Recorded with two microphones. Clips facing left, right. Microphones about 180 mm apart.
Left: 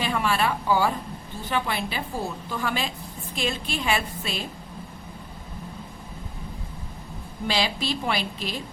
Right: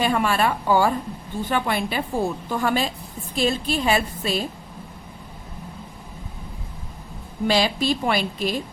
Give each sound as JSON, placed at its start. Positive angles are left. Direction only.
{"t": 0.0, "sound": "a woman's voice", "side_deg": -45}
{"t": 7.4, "sound": "a woman's voice", "side_deg": -45}